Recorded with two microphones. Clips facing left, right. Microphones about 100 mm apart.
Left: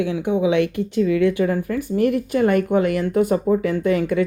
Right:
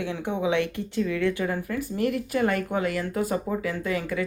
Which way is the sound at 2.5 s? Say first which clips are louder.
Left 8 dB; 20° left (ahead or behind).